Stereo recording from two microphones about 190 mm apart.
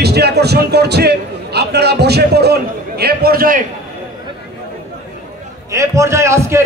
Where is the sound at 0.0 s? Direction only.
60° right (ahead or behind).